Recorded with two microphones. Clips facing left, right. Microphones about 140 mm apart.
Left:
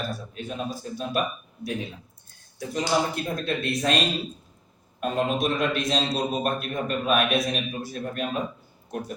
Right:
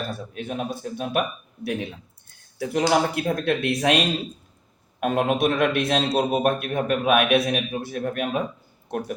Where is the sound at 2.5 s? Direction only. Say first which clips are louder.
Right 4 dB; 70° right (ahead or behind).